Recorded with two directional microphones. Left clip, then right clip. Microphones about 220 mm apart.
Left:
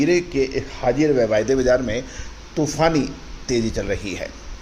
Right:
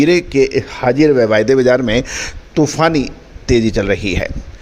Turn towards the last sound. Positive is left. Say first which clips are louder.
# right 9 dB
turn(degrees=-40)  # may be behind; listen again after turning